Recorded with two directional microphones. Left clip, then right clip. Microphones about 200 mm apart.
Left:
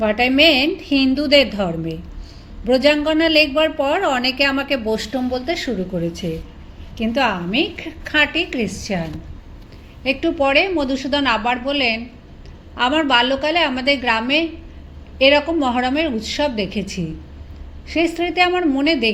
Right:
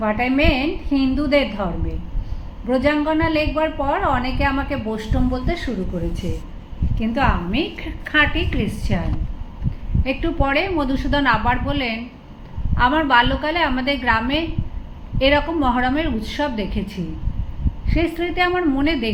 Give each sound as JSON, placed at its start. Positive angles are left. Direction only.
{"t": 0.0, "sound": "a woman's voice", "side_deg": 40}
{"t": 10.0, "sound": "a woman's voice", "side_deg": 35}